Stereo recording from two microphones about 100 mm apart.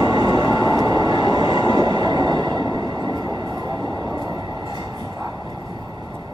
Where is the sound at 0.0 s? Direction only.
45° right (ahead or behind).